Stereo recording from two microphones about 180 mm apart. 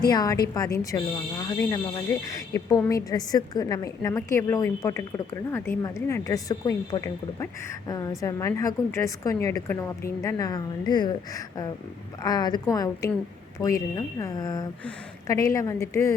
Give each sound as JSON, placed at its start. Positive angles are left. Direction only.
{"t": 0.1, "sound": "a woman's voice", "side_deg": 20}